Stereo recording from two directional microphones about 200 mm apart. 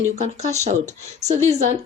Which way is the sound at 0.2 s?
35° right (ahead or behind).